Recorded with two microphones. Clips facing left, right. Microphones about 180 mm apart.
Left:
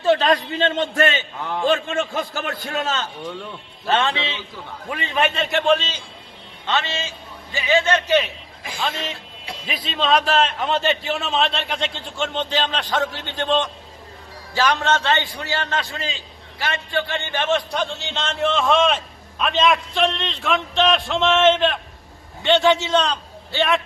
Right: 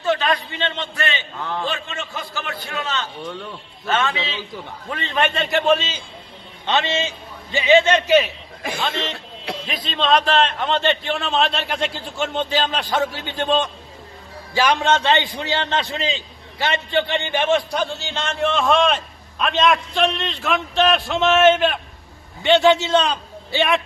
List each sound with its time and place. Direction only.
0.0 s a man's voice: 35° left (ahead or behind)
1.4 s a man's voice: 15° left (ahead or behind)
1.6 s a man's voice: 50° left (ahead or behind)
3.8 s a man's voice: 30° left (ahead or behind)
4.9 s a man's voice: 10° left (ahead or behind); by 6.0 s 10° right (ahead or behind)
6.7 s a man's voice: 20° right (ahead or behind)
8.8 s a man's voice: 5° left (ahead or behind); by 17.6 s 15° right (ahead or behind)
17.7 s a man's voice: centre (ahead or behind)